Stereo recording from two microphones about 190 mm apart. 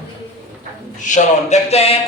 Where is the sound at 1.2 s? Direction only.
35° left (ahead or behind).